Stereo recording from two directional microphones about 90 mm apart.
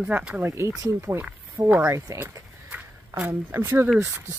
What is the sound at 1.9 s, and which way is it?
Speech, 35° right (ahead or behind).